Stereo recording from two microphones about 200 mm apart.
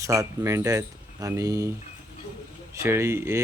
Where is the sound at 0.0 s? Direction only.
15° right (ahead or behind).